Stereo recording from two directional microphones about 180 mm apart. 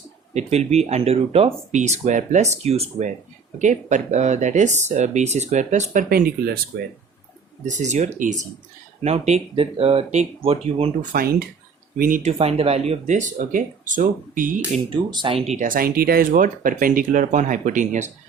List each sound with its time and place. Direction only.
0.3 s speech: 35° right (ahead or behind); by 6.6 s 60° right (ahead or behind)
7.6 s speech: 40° right (ahead or behind)
11.1 s speech: 55° right (ahead or behind)
12.2 s speech: 35° right (ahead or behind)
14.8 s speech: 30° right (ahead or behind)
15.4 s speech: 45° right (ahead or behind)